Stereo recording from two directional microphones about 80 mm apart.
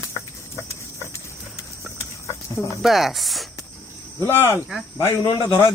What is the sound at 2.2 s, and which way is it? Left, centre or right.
Livestock, left.